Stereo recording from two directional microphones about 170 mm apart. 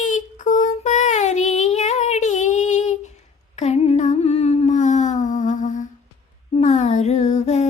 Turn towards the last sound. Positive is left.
turn(degrees=40)  # may be behind; listen again after turning